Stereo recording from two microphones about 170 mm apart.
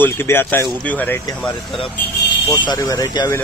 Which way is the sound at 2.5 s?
20° left (ahead or behind).